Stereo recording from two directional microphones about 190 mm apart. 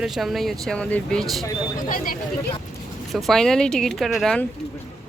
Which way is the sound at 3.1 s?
Centre (ahead or behind).